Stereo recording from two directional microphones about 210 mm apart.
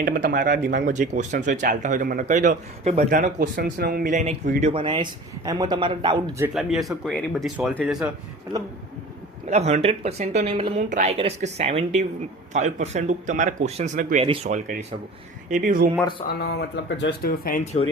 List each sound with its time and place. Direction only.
0.0 s a man's voice: 45° right (ahead or behind); by 6.3 s 20° right (ahead or behind)
6.4 s speech: centre (ahead or behind)
9.5 s speech: 30° right (ahead or behind)
16.4 s speech: 50° left (ahead or behind)